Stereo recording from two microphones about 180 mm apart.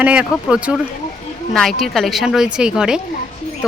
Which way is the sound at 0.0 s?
5° right (ahead or behind).